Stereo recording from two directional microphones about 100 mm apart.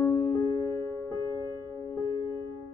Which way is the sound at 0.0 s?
30° left (ahead or behind).